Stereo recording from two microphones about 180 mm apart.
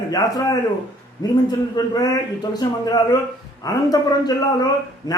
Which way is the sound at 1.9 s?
20° left (ahead or behind).